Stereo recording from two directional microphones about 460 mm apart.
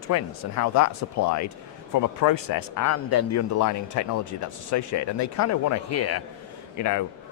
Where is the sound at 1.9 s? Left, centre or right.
Left.